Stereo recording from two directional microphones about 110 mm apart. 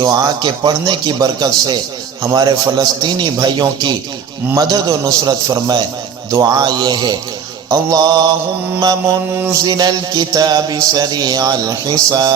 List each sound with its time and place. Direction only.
0.0 s music: 35° right (ahead or behind)